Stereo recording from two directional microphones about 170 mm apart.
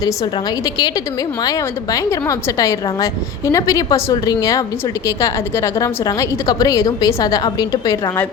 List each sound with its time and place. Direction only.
1.4 s a woman's voice: 20° left (ahead or behind)